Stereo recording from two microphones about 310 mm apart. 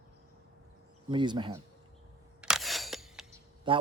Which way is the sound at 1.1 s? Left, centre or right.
Centre.